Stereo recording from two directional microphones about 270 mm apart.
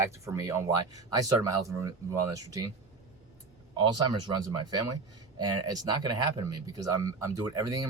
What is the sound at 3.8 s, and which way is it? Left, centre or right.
Speech, centre.